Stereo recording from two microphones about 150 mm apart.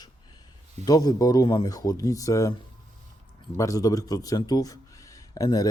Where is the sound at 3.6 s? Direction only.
25° left (ahead or behind).